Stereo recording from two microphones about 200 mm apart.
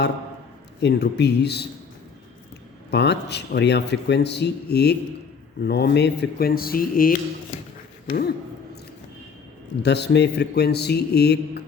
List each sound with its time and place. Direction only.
0.8 s speech: 60° left (ahead or behind)
2.9 s speech: 60° left (ahead or behind)
9.8 s speech: 55° left (ahead or behind)